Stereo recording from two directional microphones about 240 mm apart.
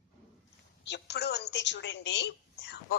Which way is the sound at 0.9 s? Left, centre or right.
Left.